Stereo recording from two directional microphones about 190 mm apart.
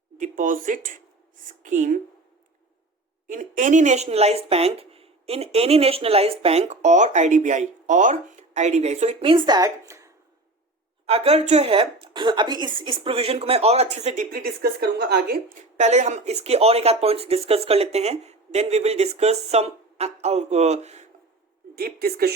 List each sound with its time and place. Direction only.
0.2 s speech: 45° right (ahead or behind)
3.2 s speech: 40° right (ahead or behind); by 10.1 s 15° right (ahead or behind)
11.0 s speech: 30° right (ahead or behind)
14.3 s a woman's voice: 50° right (ahead or behind)
15.8 s speech: 35° right (ahead or behind)
21.8 s speech: 55° right (ahead or behind)